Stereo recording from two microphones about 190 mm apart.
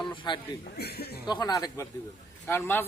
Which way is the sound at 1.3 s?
20° left (ahead or behind).